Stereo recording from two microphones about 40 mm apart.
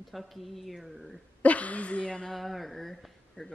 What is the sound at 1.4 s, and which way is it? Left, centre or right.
Speech, left.